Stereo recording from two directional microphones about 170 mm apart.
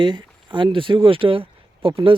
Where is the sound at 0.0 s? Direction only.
25° right (ahead or behind).